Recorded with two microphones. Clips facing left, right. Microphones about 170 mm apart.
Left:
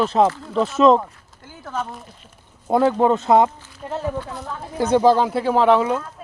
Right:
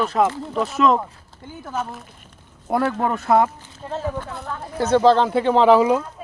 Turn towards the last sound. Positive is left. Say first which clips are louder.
# right 2 dB
turn(degrees=-10)  # may be behind; listen again after turning